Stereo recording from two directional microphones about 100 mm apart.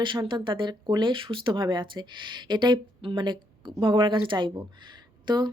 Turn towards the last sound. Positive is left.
turn(degrees=-45)  # may be behind; listen again after turning